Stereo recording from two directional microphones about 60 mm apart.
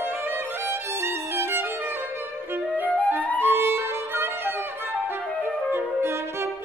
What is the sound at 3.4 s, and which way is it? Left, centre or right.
Music, right.